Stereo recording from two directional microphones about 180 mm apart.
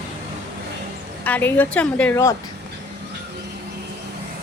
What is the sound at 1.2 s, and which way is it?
Speech, 10° left (ahead or behind).